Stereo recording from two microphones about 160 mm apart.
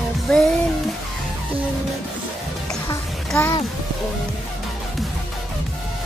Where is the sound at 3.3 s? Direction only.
20° left (ahead or behind).